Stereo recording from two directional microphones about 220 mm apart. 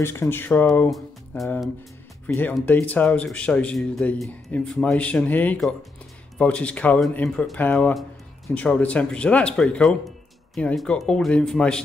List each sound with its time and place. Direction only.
0.0 s speech: 10° left (ahead or behind)